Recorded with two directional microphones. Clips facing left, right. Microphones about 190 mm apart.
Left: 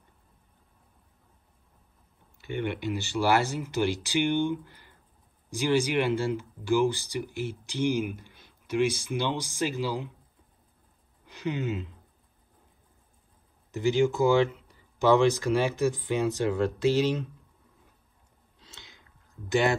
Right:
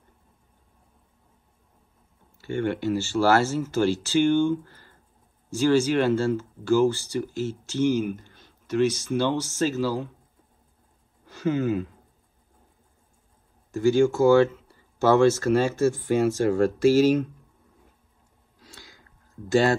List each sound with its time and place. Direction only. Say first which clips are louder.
2.4 s speech: right 5 dB; 15° left (ahead or behind)
11.2 s speech: right 7 dB; 15° left (ahead or behind)
13.7 s speech: right 5 dB; 20° left (ahead or behind)
18.6 s a sound: right 4 dB; 20° left (ahead or behind)